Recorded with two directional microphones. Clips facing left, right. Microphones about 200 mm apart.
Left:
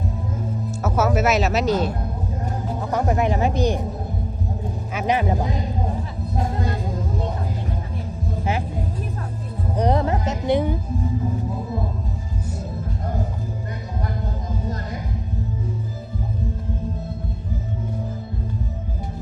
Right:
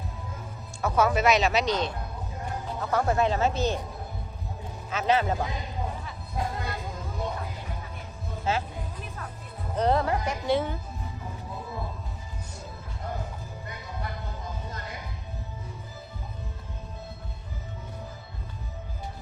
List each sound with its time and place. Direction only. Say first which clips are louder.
0.8 s speech: left 3 dB; 5° left (ahead or behind)
2.8 s speech: left 3 dB; 15° left (ahead or behind)
4.9 s speech: left 3 dB; 15° left (ahead or behind)
9.7 s speech: left 3 dB; 15° left (ahead or behind)